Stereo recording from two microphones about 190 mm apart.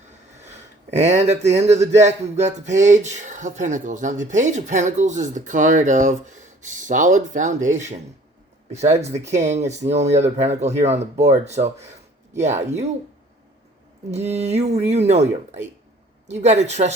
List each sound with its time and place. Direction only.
0.9 s speech: 35° right (ahead or behind)
1.8 s speech: 15° right (ahead or behind)
2.0 s speech: 35° right (ahead or behind)
14.1 s speech: 35° right (ahead or behind)